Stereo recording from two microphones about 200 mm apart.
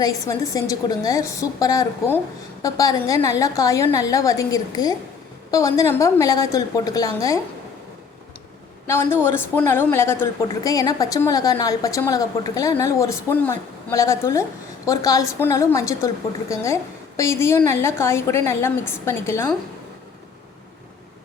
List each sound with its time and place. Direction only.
0.0 s a woman's voice: 15° left (ahead or behind)
8.9 s a woman's voice: 10° left (ahead or behind)